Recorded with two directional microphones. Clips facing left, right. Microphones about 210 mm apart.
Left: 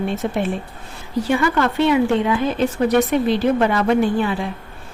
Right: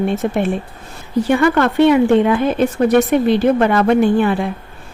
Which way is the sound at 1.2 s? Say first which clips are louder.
Right 4 dB; 55° right (ahead or behind).